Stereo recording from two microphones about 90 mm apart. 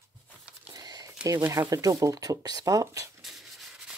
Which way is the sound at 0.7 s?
50° right (ahead or behind).